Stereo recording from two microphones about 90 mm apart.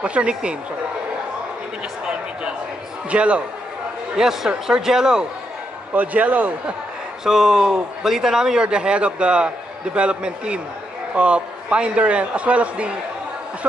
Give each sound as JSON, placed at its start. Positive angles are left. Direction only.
{"t": 0.0, "sound": "a man's voice", "side_deg": -15}
{"t": 3.1, "sound": "a man's voice", "side_deg": -15}
{"t": 5.9, "sound": "a man's voice", "side_deg": -15}
{"t": 7.2, "sound": "a man's voice", "side_deg": -5}